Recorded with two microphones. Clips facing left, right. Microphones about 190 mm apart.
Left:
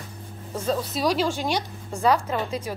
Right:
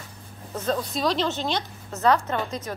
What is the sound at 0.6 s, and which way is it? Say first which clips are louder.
A woman's voice: left 1 dB; 10° left (ahead or behind).